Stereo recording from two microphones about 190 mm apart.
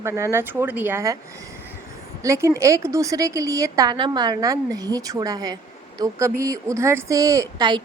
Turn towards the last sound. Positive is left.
turn(degrees=-25)  # may be behind; listen again after turning